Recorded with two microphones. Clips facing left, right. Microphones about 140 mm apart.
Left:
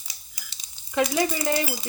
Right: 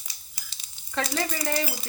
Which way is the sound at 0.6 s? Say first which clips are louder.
Left 6 dB; 15° left (ahead or behind).